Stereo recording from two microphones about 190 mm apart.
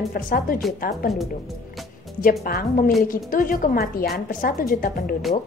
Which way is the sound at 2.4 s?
50° left (ahead or behind).